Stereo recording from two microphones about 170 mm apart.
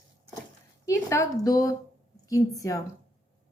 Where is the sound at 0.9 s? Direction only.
15° left (ahead or behind).